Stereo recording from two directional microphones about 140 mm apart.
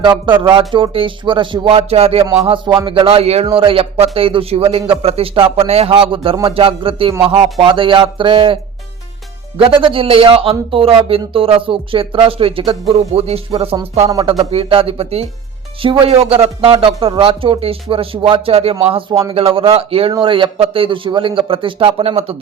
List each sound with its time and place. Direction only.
0.0 s a man's voice: 35° right (ahead or behind)
9.6 s a man's voice: 40° right (ahead or behind)